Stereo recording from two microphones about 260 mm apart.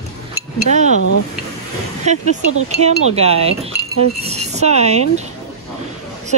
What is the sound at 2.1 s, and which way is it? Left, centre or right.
Speech, right.